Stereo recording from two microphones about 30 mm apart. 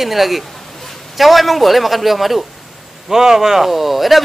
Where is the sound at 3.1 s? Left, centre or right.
Centre.